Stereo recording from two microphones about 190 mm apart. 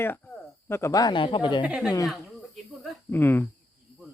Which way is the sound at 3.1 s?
10° left (ahead or behind).